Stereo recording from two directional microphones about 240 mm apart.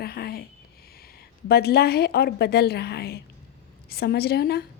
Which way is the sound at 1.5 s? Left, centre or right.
Left.